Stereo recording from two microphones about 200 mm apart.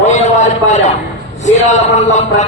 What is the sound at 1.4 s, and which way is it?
A man's voice, 35° left (ahead or behind).